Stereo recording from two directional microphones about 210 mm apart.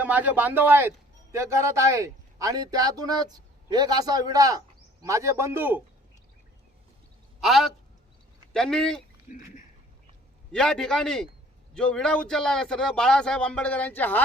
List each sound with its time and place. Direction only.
0.0 s a man's voice: 10° right (ahead or behind)
7.4 s speech: centre (ahead or behind)
10.5 s speech: 5° left (ahead or behind)